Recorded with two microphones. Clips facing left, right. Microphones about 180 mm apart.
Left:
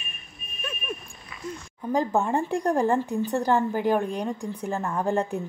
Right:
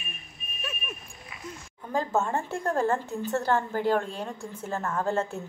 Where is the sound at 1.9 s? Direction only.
15° left (ahead or behind).